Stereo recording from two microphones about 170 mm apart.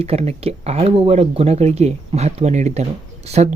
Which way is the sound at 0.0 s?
35° right (ahead or behind).